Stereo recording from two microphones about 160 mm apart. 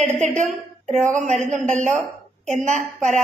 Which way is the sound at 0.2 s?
50° right (ahead or behind).